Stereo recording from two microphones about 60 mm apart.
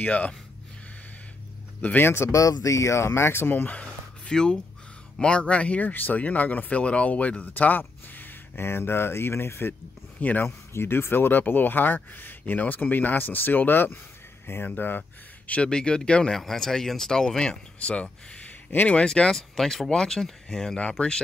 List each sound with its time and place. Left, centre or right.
0.0 s speech: left
1.8 s a man's voice: left
2.0 s speech: left
2.3 s speech: left
3.7 s a sound: centre
5.2 s speech: centre; by 9.8 s left
10.2 s speech: left
10.7 s speech: left; by 18.5 s centre
18.7 s speech: left
18.9 s speech: centre